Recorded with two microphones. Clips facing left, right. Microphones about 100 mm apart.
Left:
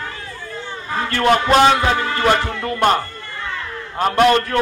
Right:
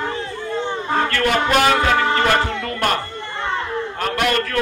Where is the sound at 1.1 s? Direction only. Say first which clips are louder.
Left 6 dB; 25° left (ahead or behind).